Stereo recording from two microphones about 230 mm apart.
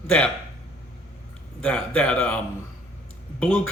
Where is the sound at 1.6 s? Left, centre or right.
Centre.